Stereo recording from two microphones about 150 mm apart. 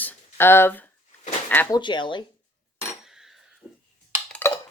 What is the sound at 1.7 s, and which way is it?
Speech, 30° left (ahead or behind).